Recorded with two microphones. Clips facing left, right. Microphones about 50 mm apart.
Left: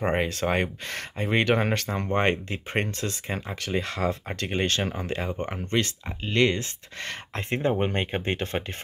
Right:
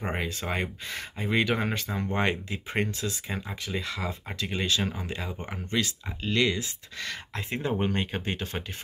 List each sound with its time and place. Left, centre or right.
0.0 s speech: left
7.7 s speech: left